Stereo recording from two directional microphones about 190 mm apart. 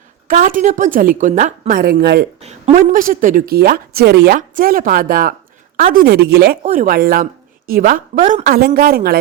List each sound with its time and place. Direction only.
0.3 s a woman's voice: 45° right (ahead or behind)
2.4 s a woman's voice: 35° right (ahead or behind); by 6.6 s 60° right (ahead or behind)
6.6 s a woman's voice: 45° right (ahead or behind)